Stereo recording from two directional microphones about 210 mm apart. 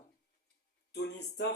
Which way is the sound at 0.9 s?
55° left (ahead or behind).